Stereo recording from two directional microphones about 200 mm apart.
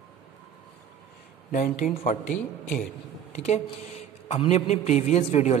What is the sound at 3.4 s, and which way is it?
A man's voice, 30° left (ahead or behind).